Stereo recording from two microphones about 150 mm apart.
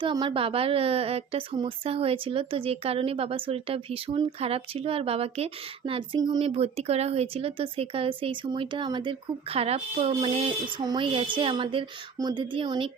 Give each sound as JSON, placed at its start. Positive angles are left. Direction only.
{"t": 0.0, "sound": "speech", "side_deg": -30}
{"t": 6.4, "sound": "speech", "side_deg": -40}